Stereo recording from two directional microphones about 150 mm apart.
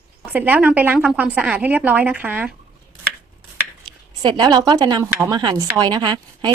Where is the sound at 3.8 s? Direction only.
30° right (ahead or behind).